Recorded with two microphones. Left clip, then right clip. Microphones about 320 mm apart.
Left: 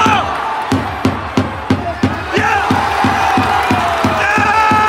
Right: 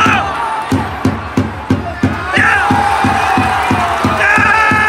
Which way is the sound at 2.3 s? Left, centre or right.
Centre.